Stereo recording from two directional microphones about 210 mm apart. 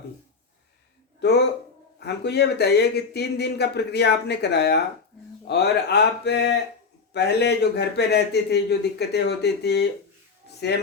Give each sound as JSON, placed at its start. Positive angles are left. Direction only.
{"t": 1.2, "sound": "speech", "side_deg": 55}